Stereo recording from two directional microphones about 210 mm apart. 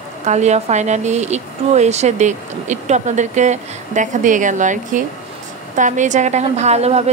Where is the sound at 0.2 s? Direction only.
35° right (ahead or behind).